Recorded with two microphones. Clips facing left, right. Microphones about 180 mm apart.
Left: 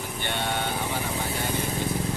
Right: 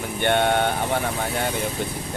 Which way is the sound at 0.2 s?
60° right (ahead or behind).